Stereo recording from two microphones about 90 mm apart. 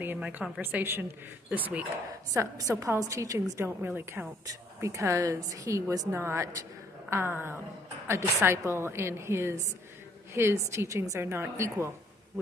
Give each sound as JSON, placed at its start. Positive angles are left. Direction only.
{"t": 0.0, "sound": "a woman's voice", "side_deg": -20}
{"t": 2.3, "sound": "a woman's voice", "side_deg": -40}